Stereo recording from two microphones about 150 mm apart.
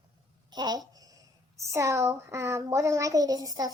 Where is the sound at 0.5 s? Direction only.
25° right (ahead or behind).